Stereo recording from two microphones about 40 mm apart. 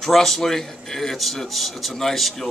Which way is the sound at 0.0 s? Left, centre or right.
Centre.